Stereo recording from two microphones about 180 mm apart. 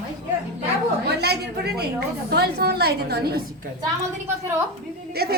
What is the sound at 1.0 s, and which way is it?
A woman's voice, 65° right (ahead or behind).